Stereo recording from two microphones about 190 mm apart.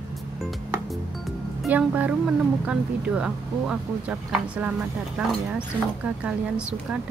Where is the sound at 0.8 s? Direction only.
Centre (ahead or behind).